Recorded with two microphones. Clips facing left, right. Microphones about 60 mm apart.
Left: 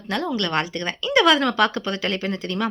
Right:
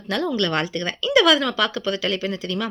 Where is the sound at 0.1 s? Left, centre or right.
Left.